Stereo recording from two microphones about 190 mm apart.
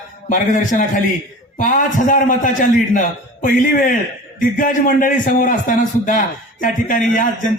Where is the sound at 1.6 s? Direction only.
45° left (ahead or behind).